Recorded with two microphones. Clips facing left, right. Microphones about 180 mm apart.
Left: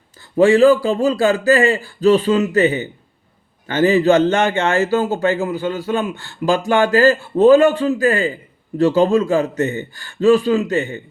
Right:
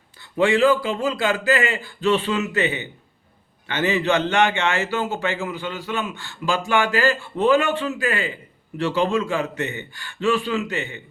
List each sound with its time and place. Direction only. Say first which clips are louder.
0.2 s a man's voice: left 7 dB; 40° left (ahead or behind)